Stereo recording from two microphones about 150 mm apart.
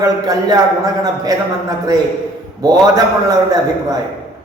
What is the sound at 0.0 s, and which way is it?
Speech, 25° right (ahead or behind).